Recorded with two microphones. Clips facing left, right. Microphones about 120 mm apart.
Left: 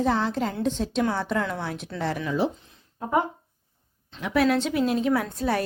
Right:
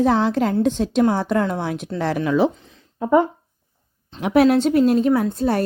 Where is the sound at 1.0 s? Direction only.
45° right (ahead or behind); by 2.5 s 70° right (ahead or behind).